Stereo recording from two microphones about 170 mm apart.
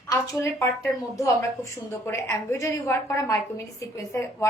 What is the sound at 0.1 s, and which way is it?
A woman's voice, 15° left (ahead or behind).